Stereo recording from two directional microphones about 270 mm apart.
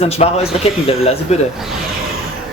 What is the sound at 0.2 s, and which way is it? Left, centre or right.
Speech, left.